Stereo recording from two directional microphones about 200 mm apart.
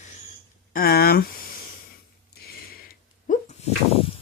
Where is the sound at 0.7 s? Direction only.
50° left (ahead or behind).